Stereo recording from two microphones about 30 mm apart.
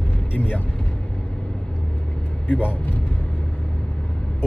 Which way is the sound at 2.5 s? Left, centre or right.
Left.